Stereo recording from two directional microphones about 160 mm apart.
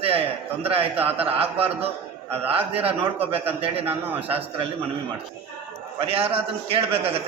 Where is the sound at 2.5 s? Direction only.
35° right (ahead or behind).